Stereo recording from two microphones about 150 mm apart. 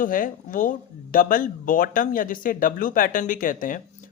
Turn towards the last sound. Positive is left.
turn(degrees=65)  # may be behind; listen again after turning